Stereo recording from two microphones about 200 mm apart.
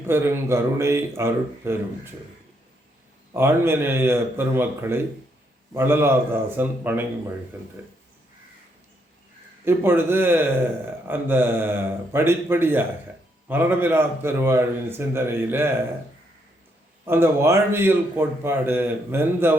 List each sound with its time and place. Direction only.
0.1 s a man's voice: 10° right (ahead or behind)
3.3 s a man's voice: 10° right (ahead or behind)
9.6 s a man's voice: 10° right (ahead or behind)
17.1 s a man's voice: 10° right (ahead or behind)